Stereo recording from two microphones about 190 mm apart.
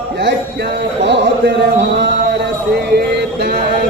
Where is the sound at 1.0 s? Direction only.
65° right (ahead or behind).